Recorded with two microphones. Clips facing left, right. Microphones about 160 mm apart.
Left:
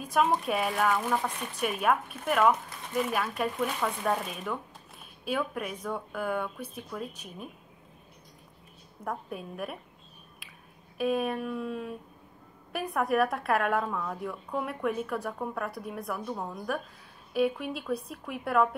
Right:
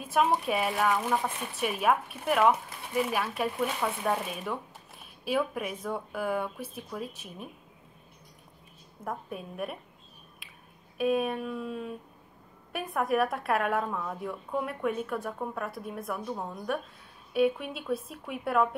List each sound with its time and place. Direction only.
0.0 s speech: centre (ahead or behind)
9.0 s speech: centre (ahead or behind)
10.4 s a sound: centre (ahead or behind)
11.0 s speech: centre (ahead or behind)